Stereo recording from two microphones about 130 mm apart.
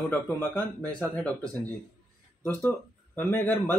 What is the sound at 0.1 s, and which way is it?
Speech, 15° left (ahead or behind).